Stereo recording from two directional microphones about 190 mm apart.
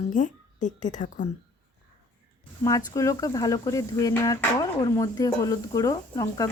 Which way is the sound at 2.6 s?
15° left (ahead or behind).